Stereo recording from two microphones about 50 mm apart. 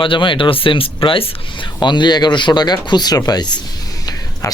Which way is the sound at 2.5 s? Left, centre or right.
Left.